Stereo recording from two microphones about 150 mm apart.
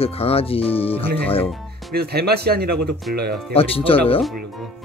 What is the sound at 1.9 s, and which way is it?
Speech, 90° right.